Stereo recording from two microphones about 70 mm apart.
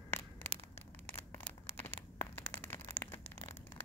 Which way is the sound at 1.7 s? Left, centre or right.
Left.